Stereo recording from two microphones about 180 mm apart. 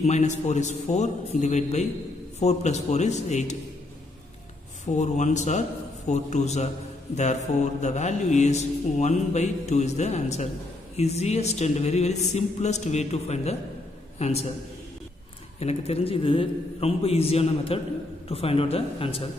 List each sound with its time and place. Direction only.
0.0 s mantra: 40° left (ahead or behind)
4.9 s mantra: 40° left (ahead or behind)
14.1 s a man's voice: 35° left (ahead or behind)
15.6 s mantra: 35° left (ahead or behind)